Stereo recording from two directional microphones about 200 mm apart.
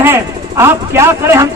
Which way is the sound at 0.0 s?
10° right (ahead or behind).